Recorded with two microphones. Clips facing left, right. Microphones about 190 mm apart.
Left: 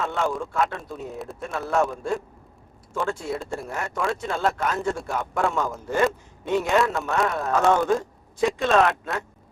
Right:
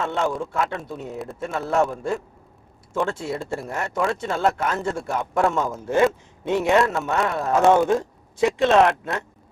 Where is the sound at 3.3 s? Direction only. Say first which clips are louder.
Right 2 dB; centre (ahead or behind).